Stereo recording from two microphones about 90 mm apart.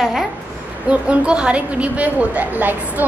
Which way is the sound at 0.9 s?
15° right (ahead or behind).